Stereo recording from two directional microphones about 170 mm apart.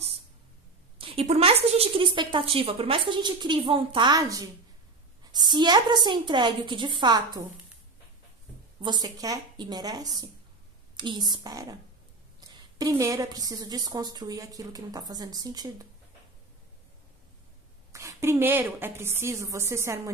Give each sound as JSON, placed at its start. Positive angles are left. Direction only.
{"t": 0.9, "sound": "a woman's voice", "side_deg": -35}
{"t": 8.8, "sound": "a woman's voice", "side_deg": -25}
{"t": 17.9, "sound": "a woman's voice", "side_deg": -15}